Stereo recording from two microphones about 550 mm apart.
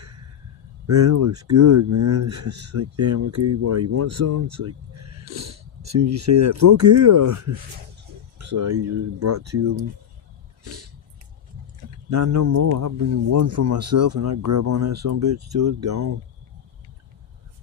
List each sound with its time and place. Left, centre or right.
0.9 s speech: right
10.6 s a sound: right
12.1 s speech: right